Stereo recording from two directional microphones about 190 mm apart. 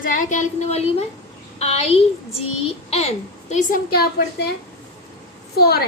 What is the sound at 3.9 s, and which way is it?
Speech, 55° left (ahead or behind).